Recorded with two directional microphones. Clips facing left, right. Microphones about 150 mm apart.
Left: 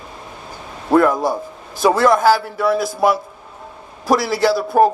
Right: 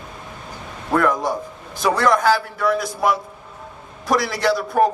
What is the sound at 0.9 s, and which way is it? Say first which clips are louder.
A man's voice: left 5 dB; 35° left (ahead or behind).